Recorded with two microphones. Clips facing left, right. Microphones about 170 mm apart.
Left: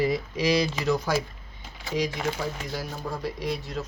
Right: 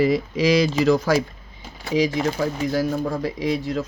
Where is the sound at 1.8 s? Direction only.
90° right.